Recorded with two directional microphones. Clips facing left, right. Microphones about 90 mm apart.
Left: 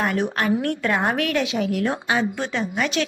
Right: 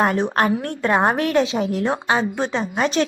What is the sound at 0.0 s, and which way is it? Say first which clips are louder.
A woman's voice: right 4 dB; 35° right (ahead or behind).